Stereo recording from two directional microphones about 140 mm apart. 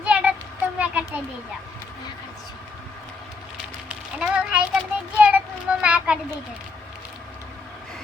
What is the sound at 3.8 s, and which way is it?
A child's voice, 10° right (ahead or behind).